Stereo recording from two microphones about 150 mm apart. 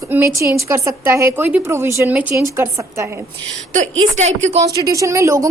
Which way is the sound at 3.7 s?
50° right (ahead or behind).